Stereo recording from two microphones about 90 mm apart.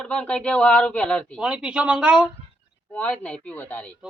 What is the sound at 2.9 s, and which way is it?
Speech, 15° left (ahead or behind).